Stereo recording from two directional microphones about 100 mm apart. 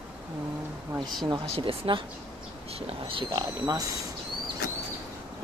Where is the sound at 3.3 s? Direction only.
40° right (ahead or behind).